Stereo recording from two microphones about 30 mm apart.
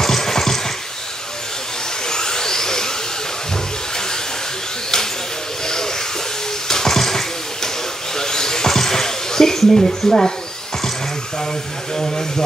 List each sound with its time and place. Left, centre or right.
0.0 s a sound: centre
2.0 s vacuum cleaner: left
5.7 s hiss: centre
6.7 s a sound: centre
9.8 s speech: left
11.9 s speech: left